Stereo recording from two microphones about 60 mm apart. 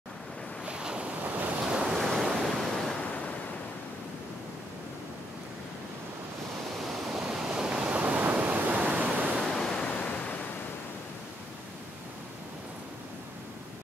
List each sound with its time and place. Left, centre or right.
0.7 s waves: centre
1.7 s waves: centre
2.0 s waves: centre
6.8 s waves: centre
8.2 s pink noise: right
9.5 s waves: centre
9.8 s waves: left